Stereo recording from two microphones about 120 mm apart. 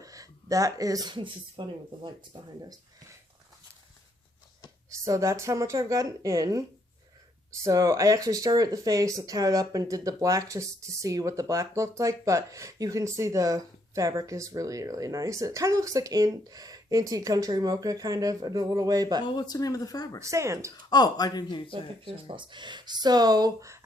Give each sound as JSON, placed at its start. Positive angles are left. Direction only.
{"t": 0.0, "sound": "speech", "side_deg": -30}
{"t": 4.9, "sound": "speech", "side_deg": -25}
{"t": 19.2, "sound": "speech", "side_deg": 35}
{"t": 20.2, "sound": "speech", "side_deg": -25}
{"t": 20.7, "sound": "speech", "side_deg": 35}
{"t": 21.7, "sound": "speech", "side_deg": -45}